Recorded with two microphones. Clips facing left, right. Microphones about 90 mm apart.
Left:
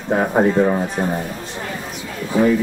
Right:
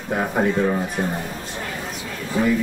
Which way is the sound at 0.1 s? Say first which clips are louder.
Left 5 dB; 30° left (ahead or behind).